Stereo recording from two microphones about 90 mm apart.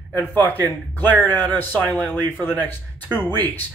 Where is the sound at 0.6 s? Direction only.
20° left (ahead or behind).